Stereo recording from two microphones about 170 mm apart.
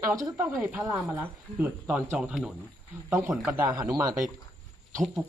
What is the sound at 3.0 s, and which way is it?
Speech, 15° right (ahead or behind).